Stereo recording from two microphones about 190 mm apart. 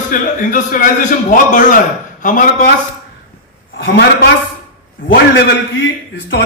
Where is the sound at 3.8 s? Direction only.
60° left (ahead or behind).